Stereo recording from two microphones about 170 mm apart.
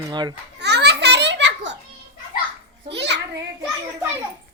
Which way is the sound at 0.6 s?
80° right.